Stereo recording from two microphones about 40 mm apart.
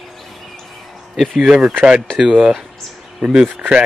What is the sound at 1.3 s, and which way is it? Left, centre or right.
Speech, centre.